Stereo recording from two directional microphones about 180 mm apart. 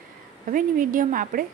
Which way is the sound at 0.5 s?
45° right (ahead or behind).